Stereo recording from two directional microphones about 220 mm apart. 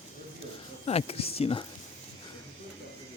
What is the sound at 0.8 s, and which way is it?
Speech, 25° left (ahead or behind).